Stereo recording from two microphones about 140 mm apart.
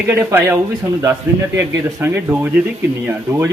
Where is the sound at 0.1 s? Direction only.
15° right (ahead or behind).